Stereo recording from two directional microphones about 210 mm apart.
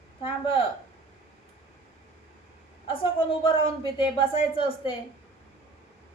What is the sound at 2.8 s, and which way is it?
Speech, 25° left (ahead or behind).